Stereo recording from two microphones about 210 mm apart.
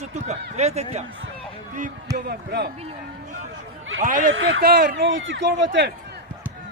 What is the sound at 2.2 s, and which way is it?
Speech, 50° right (ahead or behind).